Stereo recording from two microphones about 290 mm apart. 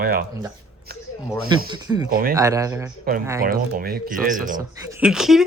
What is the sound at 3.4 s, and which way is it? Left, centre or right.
Speech, right.